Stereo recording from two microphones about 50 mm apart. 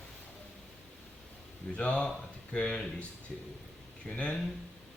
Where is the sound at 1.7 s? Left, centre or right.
Left.